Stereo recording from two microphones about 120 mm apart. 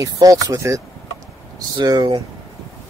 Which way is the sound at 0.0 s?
30° right (ahead or behind).